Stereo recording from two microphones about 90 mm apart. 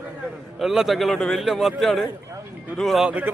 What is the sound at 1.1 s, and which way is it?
Speech, 10° left (ahead or behind).